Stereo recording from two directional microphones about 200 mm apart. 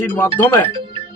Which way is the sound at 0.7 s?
25° right (ahead or behind).